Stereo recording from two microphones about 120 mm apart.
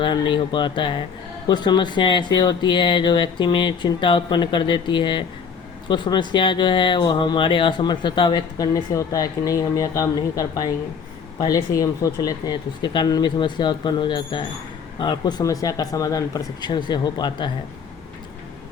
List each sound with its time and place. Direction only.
0.0 s speech: 40° left (ahead or behind)